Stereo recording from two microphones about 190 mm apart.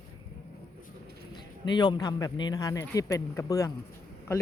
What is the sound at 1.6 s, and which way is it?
Speech, 25° left (ahead or behind).